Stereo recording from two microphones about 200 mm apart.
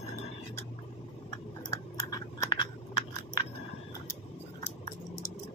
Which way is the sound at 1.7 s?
20° left (ahead or behind).